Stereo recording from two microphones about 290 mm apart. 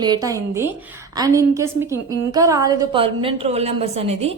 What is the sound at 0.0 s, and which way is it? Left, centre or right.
A woman's voice, centre.